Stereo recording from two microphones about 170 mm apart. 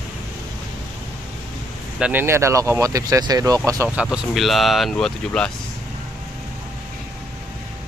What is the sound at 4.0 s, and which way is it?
Speech, centre (ahead or behind).